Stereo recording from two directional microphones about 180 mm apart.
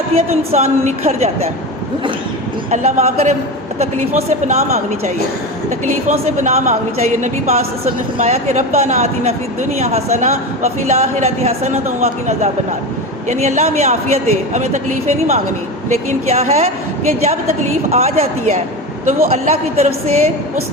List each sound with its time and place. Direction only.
0.5 s a woman's voice: 35° right (ahead or behind)
2.6 s a woman's voice: 40° right (ahead or behind)
17.9 s a woman's voice: 35° right (ahead or behind)